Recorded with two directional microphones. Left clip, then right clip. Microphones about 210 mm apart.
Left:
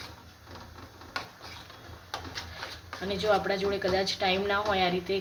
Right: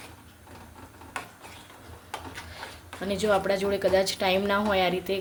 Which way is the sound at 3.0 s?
45° right (ahead or behind).